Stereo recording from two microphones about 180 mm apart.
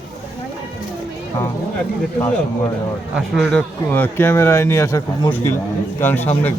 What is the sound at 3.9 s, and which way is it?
Speech, 10° left (ahead or behind).